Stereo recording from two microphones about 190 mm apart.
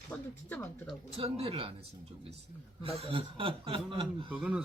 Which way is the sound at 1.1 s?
30° right (ahead or behind).